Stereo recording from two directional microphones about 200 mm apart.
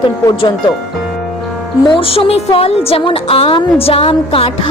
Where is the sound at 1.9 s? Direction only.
25° left (ahead or behind).